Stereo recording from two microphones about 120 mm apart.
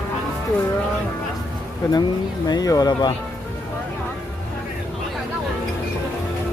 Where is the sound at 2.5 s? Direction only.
30° left (ahead or behind).